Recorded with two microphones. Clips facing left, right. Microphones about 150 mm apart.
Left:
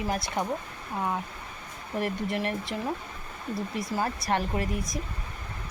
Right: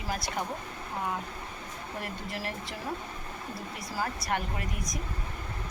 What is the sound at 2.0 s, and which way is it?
Speech, 20° left (ahead or behind).